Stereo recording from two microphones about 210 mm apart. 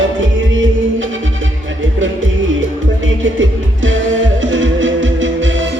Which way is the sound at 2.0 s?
65° right (ahead or behind).